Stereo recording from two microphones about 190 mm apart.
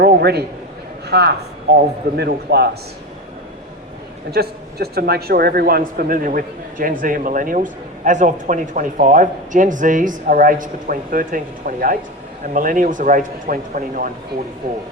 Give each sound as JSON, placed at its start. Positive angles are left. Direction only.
{"t": 0.0, "sound": "a man's voice", "side_deg": -60}
{"t": 4.3, "sound": "speech", "side_deg": -55}